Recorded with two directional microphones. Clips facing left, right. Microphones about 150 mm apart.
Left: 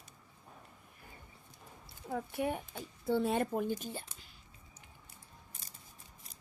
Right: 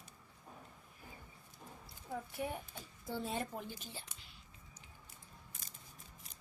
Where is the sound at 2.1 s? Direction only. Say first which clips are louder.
Left 6 dB; 70° left (ahead or behind); by 4.0 s 50° left (ahead or behind).